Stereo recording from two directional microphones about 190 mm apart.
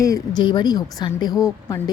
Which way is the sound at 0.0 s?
20° left (ahead or behind).